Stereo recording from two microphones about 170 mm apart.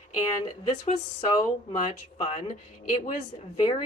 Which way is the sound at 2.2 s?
40° left (ahead or behind).